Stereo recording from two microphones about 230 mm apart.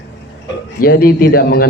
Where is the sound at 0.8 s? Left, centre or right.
Left.